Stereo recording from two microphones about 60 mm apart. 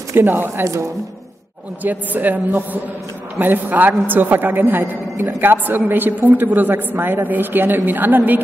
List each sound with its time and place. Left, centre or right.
0.1 s a woman's voice: right
1.8 s a man's voice: right